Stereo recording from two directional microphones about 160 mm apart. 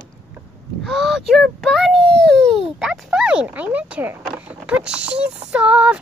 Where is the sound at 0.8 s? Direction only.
Centre (ahead or behind).